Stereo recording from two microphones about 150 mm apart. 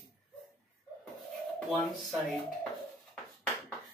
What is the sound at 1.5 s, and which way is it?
Speech, centre (ahead or behind).